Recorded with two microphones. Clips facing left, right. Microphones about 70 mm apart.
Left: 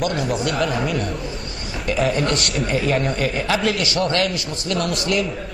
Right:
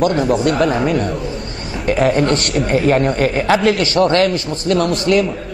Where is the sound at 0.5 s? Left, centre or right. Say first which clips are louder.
Right 6 dB; right.